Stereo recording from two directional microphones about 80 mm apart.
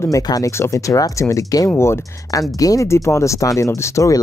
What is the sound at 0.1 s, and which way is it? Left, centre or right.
Speech, left.